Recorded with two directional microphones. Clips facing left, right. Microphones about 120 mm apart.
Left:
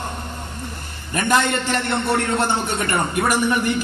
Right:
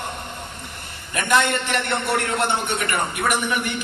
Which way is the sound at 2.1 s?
30° left (ahead or behind).